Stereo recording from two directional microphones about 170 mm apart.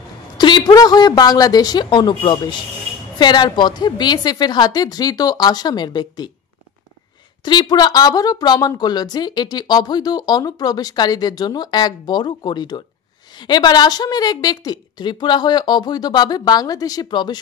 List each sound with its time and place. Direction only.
0.4 s speech: 25° left (ahead or behind)
7.4 s speech: 25° left (ahead or behind)